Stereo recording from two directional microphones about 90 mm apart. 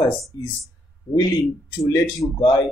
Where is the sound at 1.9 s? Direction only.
45° left (ahead or behind).